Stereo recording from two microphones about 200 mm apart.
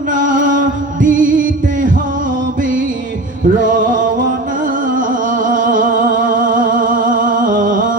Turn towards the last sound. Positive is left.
turn(degrees=-40)  # may be behind; listen again after turning